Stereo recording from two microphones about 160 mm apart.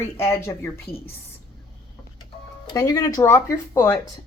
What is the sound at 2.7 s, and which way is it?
Speech, 20° left (ahead or behind).